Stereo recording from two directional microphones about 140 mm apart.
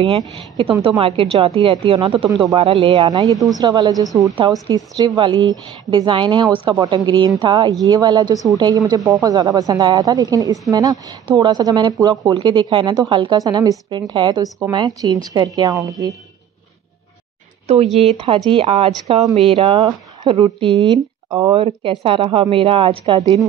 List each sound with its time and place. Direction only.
0.4 s speech: 35° right (ahead or behind)
4.1 s speech: 20° right (ahead or behind)
17.7 s speech: 55° right (ahead or behind)
18.1 s a woman's voice: 40° right (ahead or behind)
21.5 s speech: 40° right (ahead or behind)